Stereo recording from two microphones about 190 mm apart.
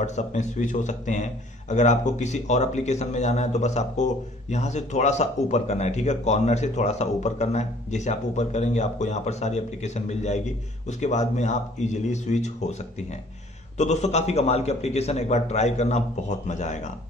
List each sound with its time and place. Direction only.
0.0 s a man's voice: 40° left (ahead or behind)
13.7 s a man's voice: 35° left (ahead or behind)